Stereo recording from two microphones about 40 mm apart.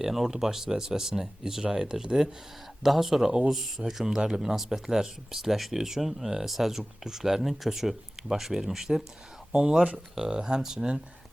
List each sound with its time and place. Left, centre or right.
0.0 s speech: centre
9.5 s speech: right